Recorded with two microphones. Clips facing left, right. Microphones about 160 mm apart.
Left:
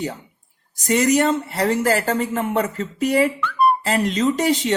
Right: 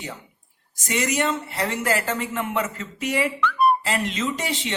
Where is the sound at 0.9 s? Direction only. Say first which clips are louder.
Left 7 dB; 40° left (ahead or behind).